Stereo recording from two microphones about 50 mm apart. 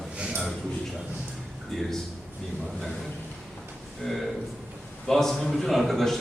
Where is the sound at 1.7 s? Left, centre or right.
Centre.